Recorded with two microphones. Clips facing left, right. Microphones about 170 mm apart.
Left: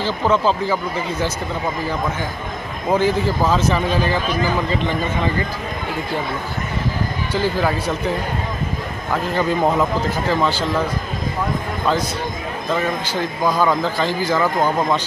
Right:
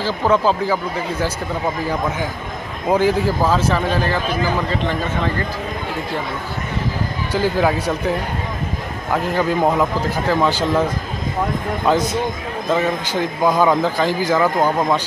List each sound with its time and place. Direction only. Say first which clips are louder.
0.0 s a man's voice: right 1 dB; 10° right (ahead or behind)
2.9 s a man's voice: right 1 dB; 10° right (ahead or behind)
7.3 s a man's voice: right 2 dB; 10° right (ahead or behind)
9.1 s a man's voice: right 1 dB; 10° right (ahead or behind)
13.1 s a man's voice: right 3 dB; 20° right (ahead or behind)